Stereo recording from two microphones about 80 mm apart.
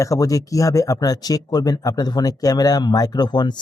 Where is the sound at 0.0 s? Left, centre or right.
Left.